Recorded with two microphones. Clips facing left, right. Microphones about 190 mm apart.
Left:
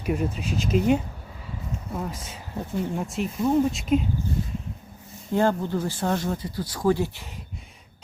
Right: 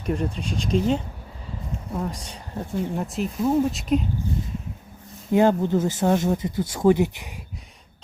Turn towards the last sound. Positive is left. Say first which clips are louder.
# right 4 dB
turn(degrees=-15)  # may be behind; listen again after turning